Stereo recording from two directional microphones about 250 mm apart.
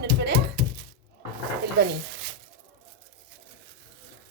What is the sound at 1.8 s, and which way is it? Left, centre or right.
Speech, right.